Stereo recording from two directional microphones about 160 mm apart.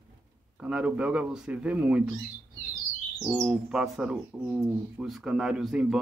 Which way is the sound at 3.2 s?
5° right (ahead or behind).